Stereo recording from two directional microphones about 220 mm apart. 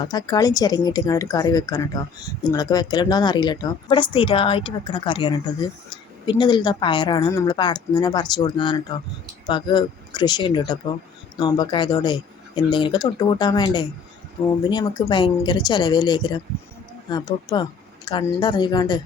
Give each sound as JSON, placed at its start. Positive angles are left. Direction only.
{"t": 0.0, "sound": "speech", "side_deg": 15}